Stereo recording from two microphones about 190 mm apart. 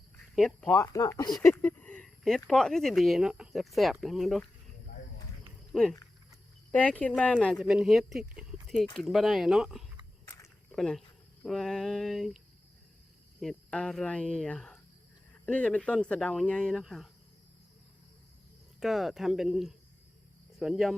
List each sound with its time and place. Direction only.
0.3 s speech: 5° left (ahead or behind)
0.8 s speech: 15° left (ahead or behind)
1.4 s a sound: 10° left (ahead or behind)
2.5 s speech: 5° left (ahead or behind)
5.7 s speech: 5° left (ahead or behind)
8.6 s a sound: centre (ahead or behind)
9.0 s speech: centre (ahead or behind)
10.2 s a sound: 15° left (ahead or behind)
10.7 s speech: 5° left (ahead or behind)
13.4 s speech: centre (ahead or behind)
18.8 s speech: centre (ahead or behind)